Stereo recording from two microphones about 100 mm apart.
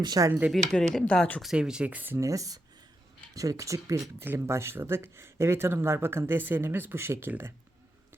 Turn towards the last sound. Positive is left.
turn(degrees=-25)  # may be behind; listen again after turning